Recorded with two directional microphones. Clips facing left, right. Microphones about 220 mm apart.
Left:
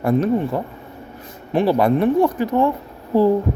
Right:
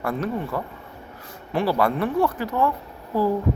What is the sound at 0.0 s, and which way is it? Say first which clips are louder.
Speech: left 8 dB; 20° left (ahead or behind).